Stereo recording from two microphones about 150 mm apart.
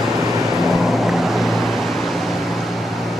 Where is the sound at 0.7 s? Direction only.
Centre (ahead or behind).